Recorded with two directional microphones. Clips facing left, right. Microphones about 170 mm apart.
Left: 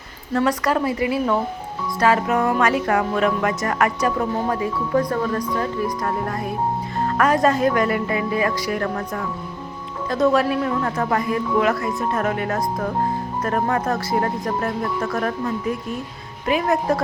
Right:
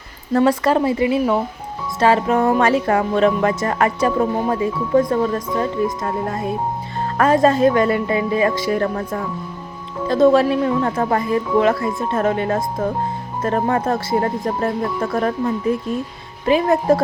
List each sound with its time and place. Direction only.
0.3 s speech: 30° right (ahead or behind)
10.1 s speech: 30° right (ahead or behind)
16.5 s speech: 30° right (ahead or behind)